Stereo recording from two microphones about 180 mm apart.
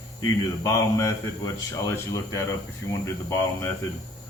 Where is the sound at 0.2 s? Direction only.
20° left (ahead or behind).